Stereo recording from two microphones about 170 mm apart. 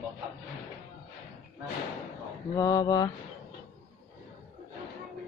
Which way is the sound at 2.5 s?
20° left (ahead or behind).